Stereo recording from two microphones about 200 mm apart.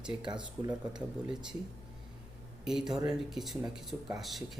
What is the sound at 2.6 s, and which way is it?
Speech, centre (ahead or behind).